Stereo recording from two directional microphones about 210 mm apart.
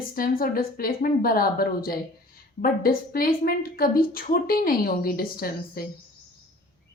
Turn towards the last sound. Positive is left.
turn(degrees=45)  # may be behind; listen again after turning